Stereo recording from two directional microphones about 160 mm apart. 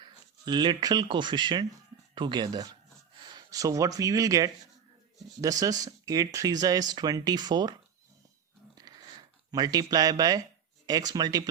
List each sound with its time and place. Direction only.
0.0 s speech: 30° right (ahead or behind)
8.8 s a sound: 25° right (ahead or behind)
10.8 s speech: 25° right (ahead or behind)